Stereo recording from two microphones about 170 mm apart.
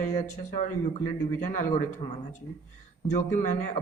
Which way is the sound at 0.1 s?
45° left (ahead or behind).